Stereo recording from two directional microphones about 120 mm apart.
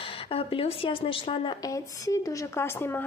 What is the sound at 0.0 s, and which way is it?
Speech, 50° left (ahead or behind).